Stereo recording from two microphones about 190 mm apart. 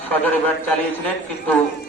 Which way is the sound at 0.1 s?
10° left (ahead or behind).